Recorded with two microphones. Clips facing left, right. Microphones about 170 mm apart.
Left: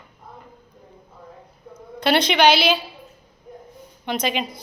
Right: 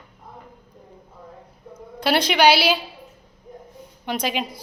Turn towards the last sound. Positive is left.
turn(degrees=-5)  # may be behind; listen again after turning